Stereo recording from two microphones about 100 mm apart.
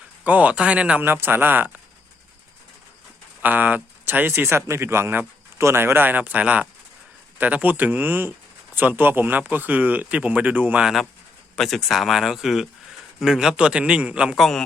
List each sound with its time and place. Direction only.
0.3 s speech: 15° right (ahead or behind)
3.4 s speech: 15° right (ahead or behind)
11.5 s speech: centre (ahead or behind)
14.3 s speech: 5° left (ahead or behind)